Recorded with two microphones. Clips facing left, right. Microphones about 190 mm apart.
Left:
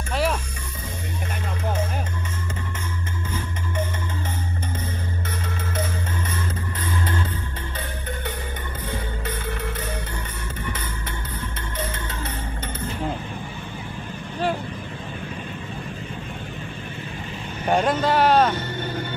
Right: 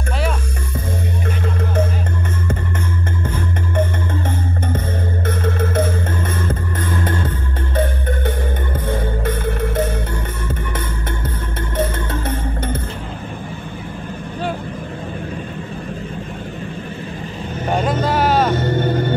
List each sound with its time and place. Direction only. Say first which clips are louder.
3.3 s music: right 7 dB; 55° right (ahead or behind)
11.7 s music: right 11 dB; 50° right (ahead or behind)
17.6 s vehicle: right 1 dB; centre (ahead or behind)
18.6 s music: right 10 dB; 50° right (ahead or behind)